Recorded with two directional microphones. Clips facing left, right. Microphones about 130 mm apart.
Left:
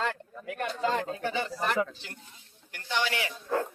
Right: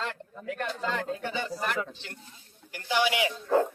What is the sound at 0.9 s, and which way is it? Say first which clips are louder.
Speech: left 1 dB; 30° left (ahead or behind).